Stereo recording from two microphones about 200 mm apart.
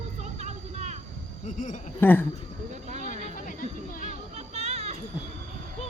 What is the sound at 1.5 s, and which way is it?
Speech, 40° left (ahead or behind).